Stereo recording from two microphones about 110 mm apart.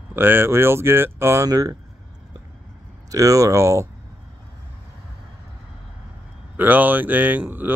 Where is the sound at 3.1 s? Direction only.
30° right (ahead or behind).